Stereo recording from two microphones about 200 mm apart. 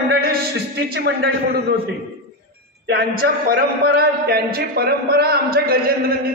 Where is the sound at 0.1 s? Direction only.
50° right (ahead or behind).